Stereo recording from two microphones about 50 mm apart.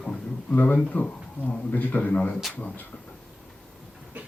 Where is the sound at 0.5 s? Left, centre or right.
Left.